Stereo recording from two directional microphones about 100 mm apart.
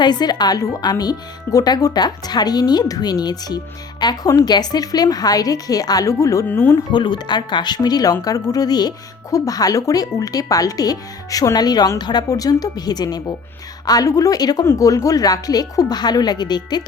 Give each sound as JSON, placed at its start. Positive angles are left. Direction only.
{"t": 0.0, "sound": "speech", "side_deg": 45}
{"t": 6.5, "sound": "speech", "side_deg": 20}
{"t": 6.9, "sound": "speech", "side_deg": 45}